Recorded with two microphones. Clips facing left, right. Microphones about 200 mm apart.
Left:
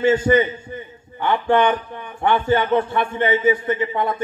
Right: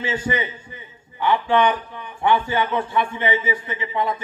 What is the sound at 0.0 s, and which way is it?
A man's voice, 50° left (ahead or behind).